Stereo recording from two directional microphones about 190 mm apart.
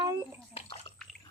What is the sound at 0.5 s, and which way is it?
Bathtub, 35° left (ahead or behind).